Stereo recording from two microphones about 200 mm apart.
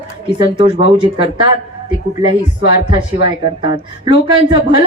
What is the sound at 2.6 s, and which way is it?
A woman's voice, 25° right (ahead or behind).